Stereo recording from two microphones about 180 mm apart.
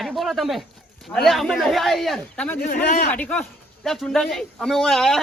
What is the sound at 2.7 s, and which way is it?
Speech, 55° left (ahead or behind).